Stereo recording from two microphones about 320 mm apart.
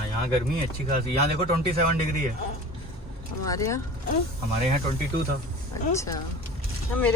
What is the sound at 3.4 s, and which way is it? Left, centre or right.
Speech, centre.